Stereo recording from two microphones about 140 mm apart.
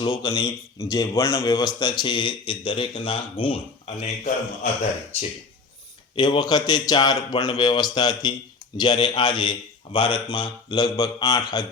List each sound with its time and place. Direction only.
0.0 s a man's voice: 30° left (ahead or behind)
6.1 s a man's voice: 30° left (ahead or behind)